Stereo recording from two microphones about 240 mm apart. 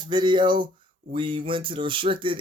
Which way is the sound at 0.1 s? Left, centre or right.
Centre.